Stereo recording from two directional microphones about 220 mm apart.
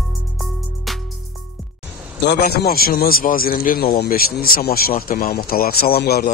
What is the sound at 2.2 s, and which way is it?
A man's voice, 45° left (ahead or behind).